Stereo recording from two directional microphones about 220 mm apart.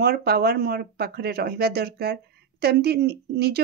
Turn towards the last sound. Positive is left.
turn(degrees=-45)  # may be behind; listen again after turning